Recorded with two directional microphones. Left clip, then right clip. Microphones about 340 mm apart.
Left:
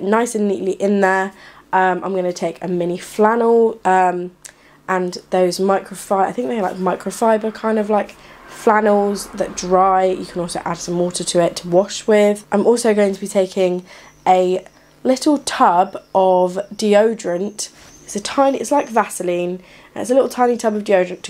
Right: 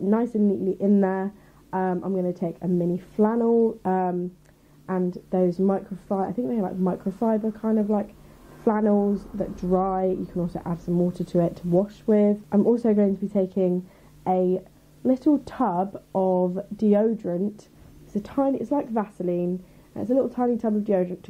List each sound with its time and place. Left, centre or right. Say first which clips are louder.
0.1 s speech: left 8 dB; centre
0.6 s speech: left 6 dB; left
0.8 s speech: left 10 dB; centre
11.1 s speech: left 9 dB; centre
16.2 s speech: left 9 dB; left
16.7 s speech: left 8 dB; centre